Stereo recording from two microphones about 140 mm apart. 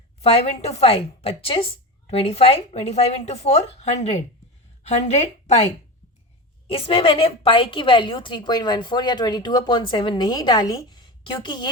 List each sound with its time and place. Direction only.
0.2 s a woman's voice: 45° left (ahead or behind)